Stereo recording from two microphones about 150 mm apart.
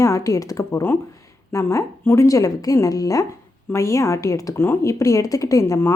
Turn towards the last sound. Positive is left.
turn(degrees=20)  # may be behind; listen again after turning